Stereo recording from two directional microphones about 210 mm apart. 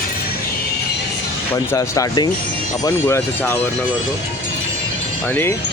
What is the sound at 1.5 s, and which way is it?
Speech, 15° left (ahead or behind).